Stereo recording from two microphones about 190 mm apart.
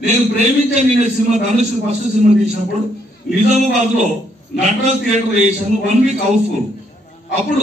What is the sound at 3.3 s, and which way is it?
A man's voice, 35° right (ahead or behind).